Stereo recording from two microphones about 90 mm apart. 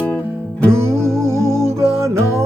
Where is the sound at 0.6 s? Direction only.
30° right (ahead or behind).